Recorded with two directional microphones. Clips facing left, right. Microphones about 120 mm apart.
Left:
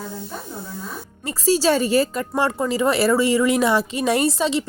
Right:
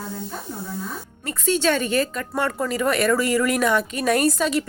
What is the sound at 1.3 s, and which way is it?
Speech, 35° left (ahead or behind).